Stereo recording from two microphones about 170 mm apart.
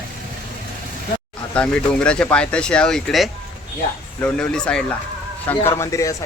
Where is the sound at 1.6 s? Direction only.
5° left (ahead or behind).